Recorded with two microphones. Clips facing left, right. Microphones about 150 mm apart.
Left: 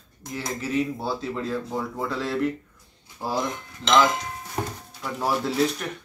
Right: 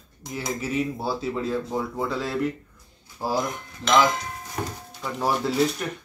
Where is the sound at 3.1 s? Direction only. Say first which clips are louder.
Right 2 dB; 10° right (ahead or behind).